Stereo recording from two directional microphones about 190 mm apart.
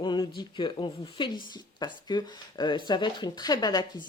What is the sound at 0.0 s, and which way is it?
Speech, 25° left (ahead or behind).